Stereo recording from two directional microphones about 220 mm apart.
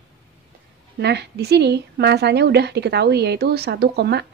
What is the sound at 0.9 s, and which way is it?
A woman's voice, 50° right (ahead or behind).